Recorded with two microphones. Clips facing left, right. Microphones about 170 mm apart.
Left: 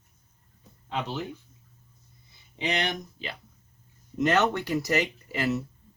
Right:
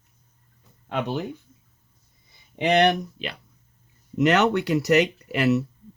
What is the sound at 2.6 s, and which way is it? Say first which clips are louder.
Speech: right 10 dB; 60° right (ahead or behind).